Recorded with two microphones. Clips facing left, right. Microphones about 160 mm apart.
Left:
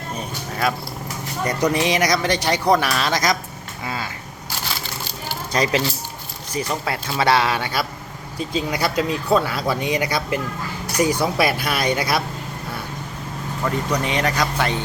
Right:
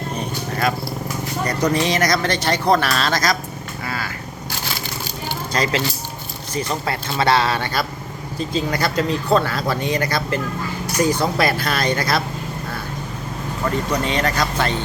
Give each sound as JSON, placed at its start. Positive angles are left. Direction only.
{"t": 1.5, "sound": "speech", "side_deg": 15}
{"t": 3.8, "sound": "vehicle", "side_deg": 20}
{"t": 5.5, "sound": "speech", "side_deg": 15}
{"t": 14.0, "sound": "speech", "side_deg": 15}